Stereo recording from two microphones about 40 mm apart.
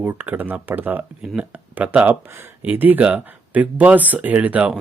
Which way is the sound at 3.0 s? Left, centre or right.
Right.